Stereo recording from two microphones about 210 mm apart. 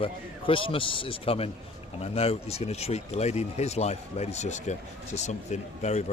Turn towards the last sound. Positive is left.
turn(degrees=35)  # may be behind; listen again after turning